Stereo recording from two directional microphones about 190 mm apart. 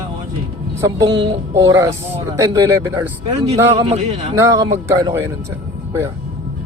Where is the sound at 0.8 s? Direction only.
20° right (ahead or behind).